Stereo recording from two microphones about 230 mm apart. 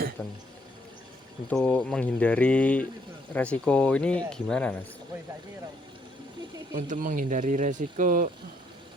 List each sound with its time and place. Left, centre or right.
0.2 s speech: centre
1.5 s speech: centre
6.7 s speech: right